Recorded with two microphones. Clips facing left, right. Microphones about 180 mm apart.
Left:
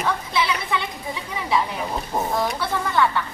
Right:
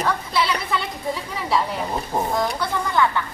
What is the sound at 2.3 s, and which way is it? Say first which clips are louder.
Speech: right 1 dB; 5° left (ahead or behind).